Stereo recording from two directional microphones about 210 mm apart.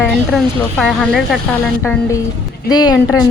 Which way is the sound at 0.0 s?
Centre (ahead or behind).